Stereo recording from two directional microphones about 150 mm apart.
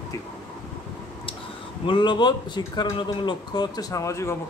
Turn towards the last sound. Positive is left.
turn(degrees=20)  # may be behind; listen again after turning